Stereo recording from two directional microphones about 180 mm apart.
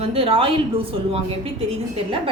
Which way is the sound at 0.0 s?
30° right (ahead or behind).